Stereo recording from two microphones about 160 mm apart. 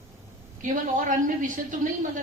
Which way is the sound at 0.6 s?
55° right (ahead or behind).